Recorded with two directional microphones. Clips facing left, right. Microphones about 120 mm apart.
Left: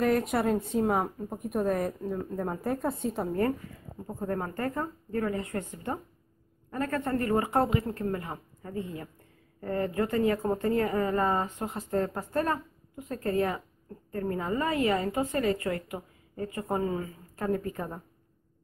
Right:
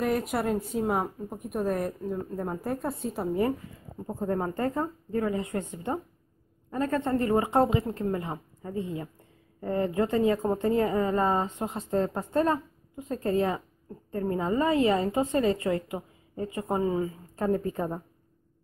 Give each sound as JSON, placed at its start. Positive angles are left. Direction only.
{"t": 0.0, "sound": "speech", "side_deg": 0}
{"t": 4.2, "sound": "a woman's voice", "side_deg": -20}